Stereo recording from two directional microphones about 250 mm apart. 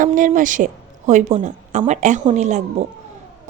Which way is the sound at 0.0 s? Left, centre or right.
Right.